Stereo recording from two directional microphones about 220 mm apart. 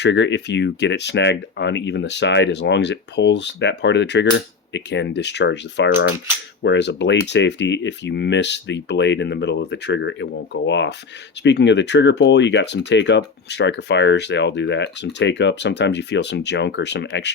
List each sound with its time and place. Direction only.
0.0 s speech: 55° left (ahead or behind)